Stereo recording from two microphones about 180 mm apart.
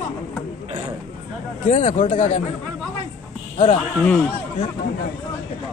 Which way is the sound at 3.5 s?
40° left (ahead or behind).